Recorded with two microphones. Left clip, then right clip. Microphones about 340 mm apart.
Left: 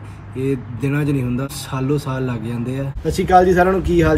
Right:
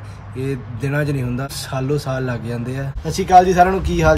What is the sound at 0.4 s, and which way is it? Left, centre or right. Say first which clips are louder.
Speech: left 3 dB; centre.